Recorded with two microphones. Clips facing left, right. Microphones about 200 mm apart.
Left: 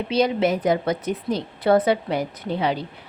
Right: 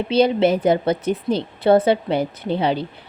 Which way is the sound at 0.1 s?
30° right (ahead or behind).